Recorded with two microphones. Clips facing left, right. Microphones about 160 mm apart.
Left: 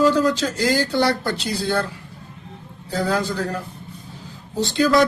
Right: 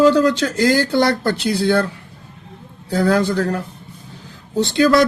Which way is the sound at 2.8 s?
60° right (ahead or behind).